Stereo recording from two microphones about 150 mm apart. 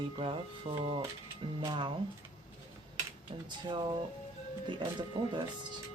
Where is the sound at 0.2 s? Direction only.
35° right (ahead or behind).